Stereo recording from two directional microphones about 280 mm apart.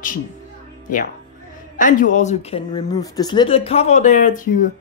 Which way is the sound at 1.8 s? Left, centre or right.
Left.